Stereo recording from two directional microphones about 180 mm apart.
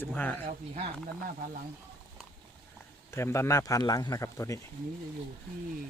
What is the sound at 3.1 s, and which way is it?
Speech, 15° left (ahead or behind).